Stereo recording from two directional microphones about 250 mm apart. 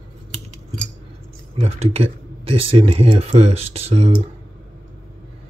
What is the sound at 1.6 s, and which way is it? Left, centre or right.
Speech, right.